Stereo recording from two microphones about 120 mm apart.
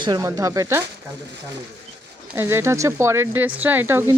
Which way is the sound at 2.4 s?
20° right (ahead or behind).